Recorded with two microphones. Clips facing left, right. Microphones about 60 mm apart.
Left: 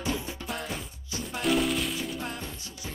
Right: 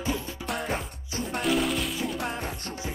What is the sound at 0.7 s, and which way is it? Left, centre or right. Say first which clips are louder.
Music: right 5 dB; right.